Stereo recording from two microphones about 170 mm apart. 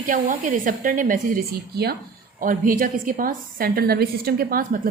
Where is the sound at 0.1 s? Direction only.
50° right (ahead or behind); by 2.0 s 70° right (ahead or behind).